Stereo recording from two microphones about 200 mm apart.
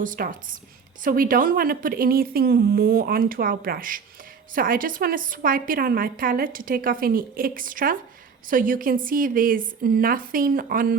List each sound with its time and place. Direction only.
0.0 s a woman's voice: 40° right (ahead or behind)